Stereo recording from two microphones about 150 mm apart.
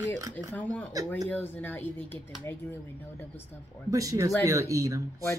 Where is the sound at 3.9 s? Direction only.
20° right (ahead or behind).